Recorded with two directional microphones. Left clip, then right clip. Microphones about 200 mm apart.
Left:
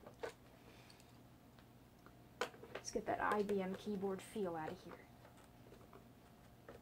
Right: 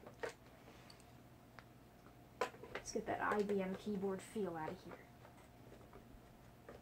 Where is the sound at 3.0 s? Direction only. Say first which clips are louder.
Left 1 dB; 5° left (ahead or behind).